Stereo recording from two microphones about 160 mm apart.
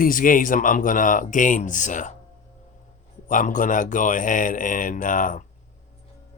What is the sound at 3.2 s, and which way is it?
Speech, 55° left (ahead or behind).